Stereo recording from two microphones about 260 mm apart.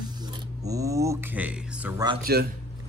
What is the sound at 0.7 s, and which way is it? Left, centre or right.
Speech, centre.